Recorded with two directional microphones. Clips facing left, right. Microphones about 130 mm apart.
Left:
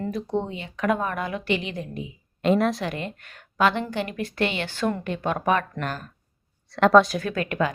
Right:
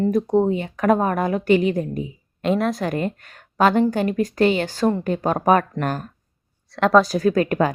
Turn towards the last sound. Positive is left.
turn(degrees=-40)  # may be behind; listen again after turning